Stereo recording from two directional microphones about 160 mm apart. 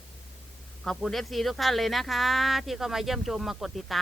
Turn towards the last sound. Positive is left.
turn(degrees=0)  # may be behind; listen again after turning